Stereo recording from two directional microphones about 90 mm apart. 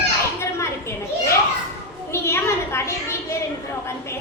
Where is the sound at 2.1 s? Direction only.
30° left (ahead or behind).